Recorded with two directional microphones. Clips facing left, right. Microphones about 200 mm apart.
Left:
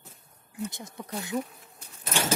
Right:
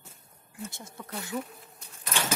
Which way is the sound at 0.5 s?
15° left (ahead or behind).